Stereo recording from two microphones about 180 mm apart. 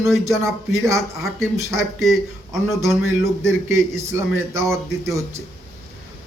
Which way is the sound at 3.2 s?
15° right (ahead or behind).